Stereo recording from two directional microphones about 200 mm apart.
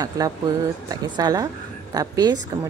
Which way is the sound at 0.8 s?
20° right (ahead or behind).